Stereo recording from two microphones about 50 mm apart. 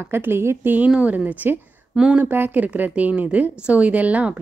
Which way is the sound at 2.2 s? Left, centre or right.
Right.